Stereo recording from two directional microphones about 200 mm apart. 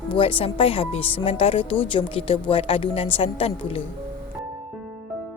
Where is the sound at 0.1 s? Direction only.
25° left (ahead or behind).